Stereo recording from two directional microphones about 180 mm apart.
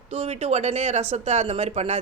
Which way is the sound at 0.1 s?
35° right (ahead or behind).